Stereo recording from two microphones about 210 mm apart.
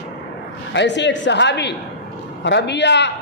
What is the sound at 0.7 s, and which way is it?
Speech, 55° left (ahead or behind).